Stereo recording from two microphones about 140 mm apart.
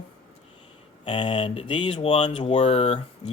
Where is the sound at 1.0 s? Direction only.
40° left (ahead or behind).